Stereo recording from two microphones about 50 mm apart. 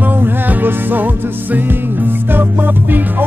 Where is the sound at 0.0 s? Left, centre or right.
Right.